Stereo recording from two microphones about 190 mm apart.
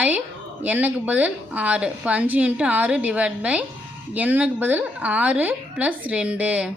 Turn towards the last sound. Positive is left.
turn(degrees=-5)  # may be behind; listen again after turning